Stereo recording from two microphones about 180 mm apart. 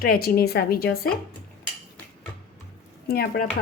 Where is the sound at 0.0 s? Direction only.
55° left (ahead or behind).